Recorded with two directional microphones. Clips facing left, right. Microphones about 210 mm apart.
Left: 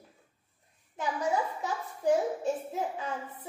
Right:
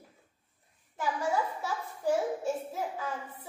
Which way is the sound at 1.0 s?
20° left (ahead or behind).